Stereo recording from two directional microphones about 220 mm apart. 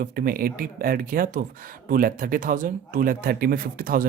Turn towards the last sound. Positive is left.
turn(degrees=-40)  # may be behind; listen again after turning